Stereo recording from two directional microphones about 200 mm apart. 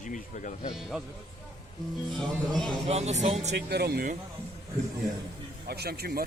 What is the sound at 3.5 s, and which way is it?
Speech, 55° right (ahead or behind).